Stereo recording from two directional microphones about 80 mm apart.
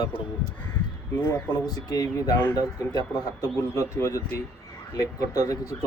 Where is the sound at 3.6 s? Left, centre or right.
Left.